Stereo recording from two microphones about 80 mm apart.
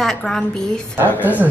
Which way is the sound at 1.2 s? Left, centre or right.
Right.